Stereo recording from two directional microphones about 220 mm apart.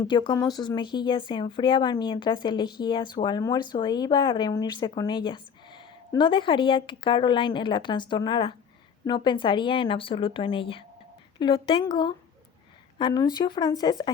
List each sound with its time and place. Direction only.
0.0 s speech: 20° left (ahead or behind)